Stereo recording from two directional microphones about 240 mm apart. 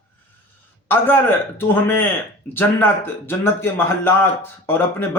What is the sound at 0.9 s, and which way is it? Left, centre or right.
A man's voice, centre.